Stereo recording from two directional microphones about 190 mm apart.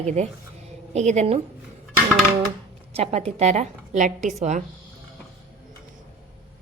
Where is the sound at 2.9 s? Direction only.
35° right (ahead or behind).